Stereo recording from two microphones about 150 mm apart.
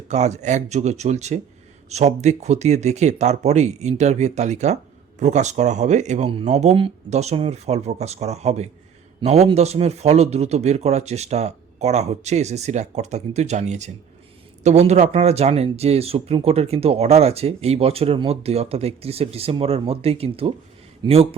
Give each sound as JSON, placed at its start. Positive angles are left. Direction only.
{"t": 0.1, "sound": "a man's voice", "side_deg": -50}